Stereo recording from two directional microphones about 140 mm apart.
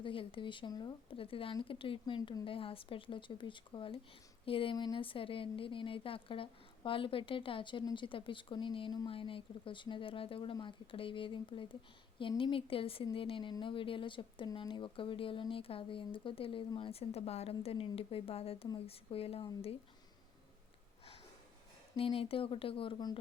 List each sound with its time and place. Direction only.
0.0 s speech: 40° left (ahead or behind)
21.9 s speech: 40° left (ahead or behind)